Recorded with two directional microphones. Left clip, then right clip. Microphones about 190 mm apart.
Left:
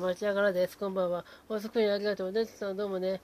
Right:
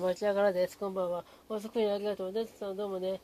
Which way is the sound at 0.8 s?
30° left (ahead or behind).